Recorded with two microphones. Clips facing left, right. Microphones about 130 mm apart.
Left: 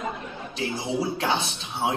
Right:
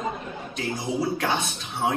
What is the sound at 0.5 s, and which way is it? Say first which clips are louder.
Speech: even; 25° left (ahead or behind).